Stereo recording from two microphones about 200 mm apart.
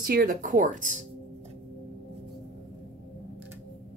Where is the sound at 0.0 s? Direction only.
45° right (ahead or behind).